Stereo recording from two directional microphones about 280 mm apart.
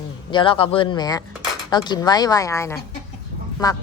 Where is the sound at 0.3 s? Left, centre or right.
Centre.